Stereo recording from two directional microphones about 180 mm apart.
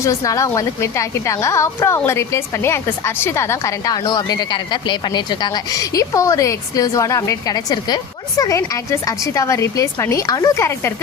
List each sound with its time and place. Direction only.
0.0 s a woman's voice: 15° left (ahead or behind)